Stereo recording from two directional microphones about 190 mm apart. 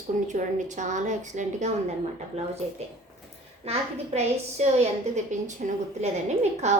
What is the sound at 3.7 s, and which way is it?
A woman's voice, 35° right (ahead or behind).